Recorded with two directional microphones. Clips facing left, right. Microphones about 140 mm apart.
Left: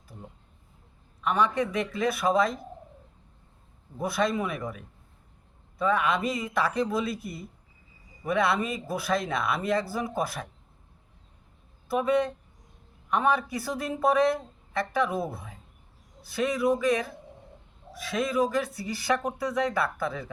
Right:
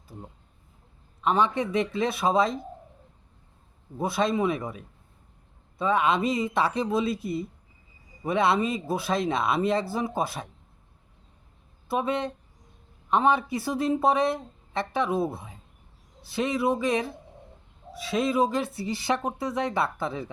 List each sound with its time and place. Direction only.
1.2 s speech: 25° right (ahead or behind)
4.0 s speech: 25° right (ahead or behind)
11.9 s speech: 25° right (ahead or behind)
18.1 s speech: 25° right (ahead or behind)